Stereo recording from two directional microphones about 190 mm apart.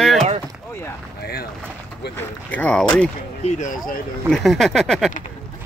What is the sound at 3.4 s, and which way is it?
Speech, 40° left (ahead or behind).